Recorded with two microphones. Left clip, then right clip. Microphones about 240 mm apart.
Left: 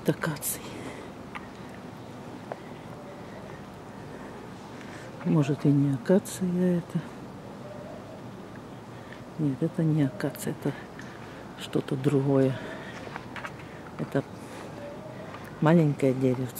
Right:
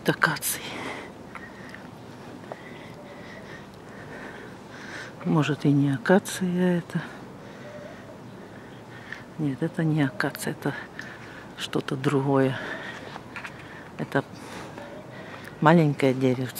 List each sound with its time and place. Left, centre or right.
0.0 s speech: centre
5.3 s speech: centre
9.4 s speech: centre
15.6 s speech: centre